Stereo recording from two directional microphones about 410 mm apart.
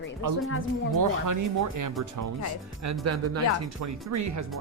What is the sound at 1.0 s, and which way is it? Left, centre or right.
Speech, right.